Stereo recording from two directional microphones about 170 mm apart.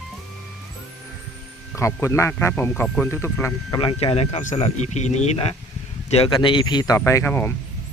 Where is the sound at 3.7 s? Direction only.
35° left (ahead or behind); by 7.5 s 15° left (ahead or behind).